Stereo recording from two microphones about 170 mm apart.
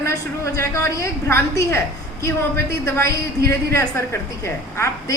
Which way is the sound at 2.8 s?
15° left (ahead or behind).